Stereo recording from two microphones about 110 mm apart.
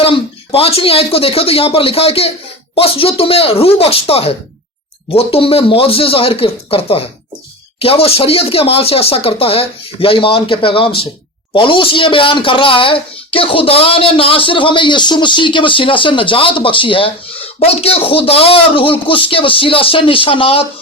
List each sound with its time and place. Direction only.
0.0 s speech: 60° left (ahead or behind)